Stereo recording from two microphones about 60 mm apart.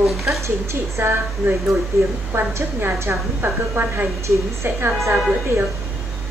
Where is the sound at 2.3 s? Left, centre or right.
Right.